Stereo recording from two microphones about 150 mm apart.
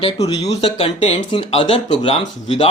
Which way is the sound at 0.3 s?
45° left (ahead or behind).